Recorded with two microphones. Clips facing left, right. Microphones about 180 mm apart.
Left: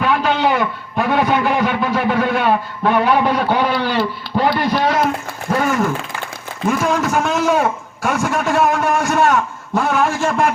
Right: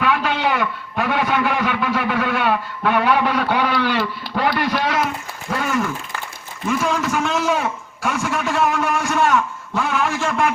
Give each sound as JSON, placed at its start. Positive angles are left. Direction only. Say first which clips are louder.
{"t": 0.0, "sound": "a man's voice", "louder": "left 3 dB", "side_deg": 35}
{"t": 5.5, "sound": "a sound", "louder": "left 4 dB", "side_deg": 40}
{"t": 6.7, "sound": "a man's voice", "louder": "left 3 dB", "side_deg": 45}